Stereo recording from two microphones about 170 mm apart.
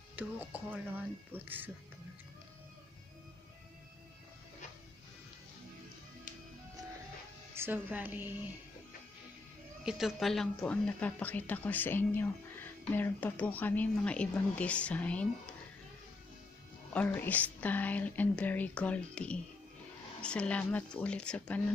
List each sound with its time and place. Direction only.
0.1 s speech: 10° right (ahead or behind)
7.5 s speech: 10° right (ahead or behind)
9.8 s speech: centre (ahead or behind)
16.9 s speech: 10° left (ahead or behind)